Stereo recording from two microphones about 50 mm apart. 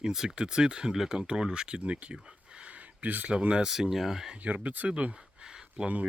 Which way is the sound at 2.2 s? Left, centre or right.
Centre.